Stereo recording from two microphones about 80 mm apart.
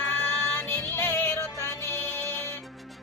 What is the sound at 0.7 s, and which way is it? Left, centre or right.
Music, left.